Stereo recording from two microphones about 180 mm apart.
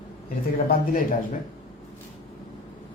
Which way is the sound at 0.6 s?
55° left (ahead or behind).